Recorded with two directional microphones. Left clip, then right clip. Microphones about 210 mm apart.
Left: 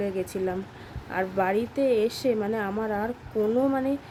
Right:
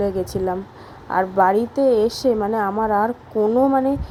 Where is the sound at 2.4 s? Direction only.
5° right (ahead or behind).